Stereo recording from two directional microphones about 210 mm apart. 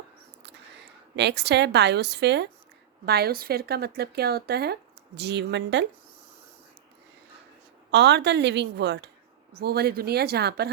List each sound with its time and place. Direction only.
1.1 s a woman's voice: 55° right (ahead or behind)
7.9 s a woman's voice: 55° right (ahead or behind)